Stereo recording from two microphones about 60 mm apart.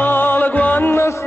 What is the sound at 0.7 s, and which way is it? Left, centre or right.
Music, left.